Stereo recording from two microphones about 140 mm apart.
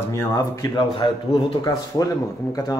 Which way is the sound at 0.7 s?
35° left (ahead or behind).